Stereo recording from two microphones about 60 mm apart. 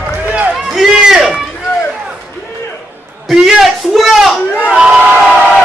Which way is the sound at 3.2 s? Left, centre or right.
Centre.